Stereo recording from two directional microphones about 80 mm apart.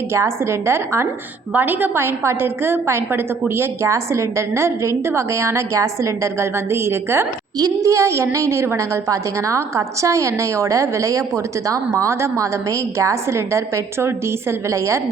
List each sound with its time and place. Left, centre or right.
0.1 s a woman's voice: right